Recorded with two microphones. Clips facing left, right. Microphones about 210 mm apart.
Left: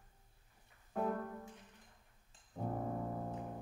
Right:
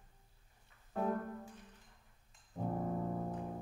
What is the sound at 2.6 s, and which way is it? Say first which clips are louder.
Brass instrument: right 2 dB; 5° right (ahead or behind).